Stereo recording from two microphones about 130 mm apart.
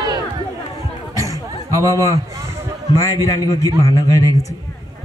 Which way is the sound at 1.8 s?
25° left (ahead or behind).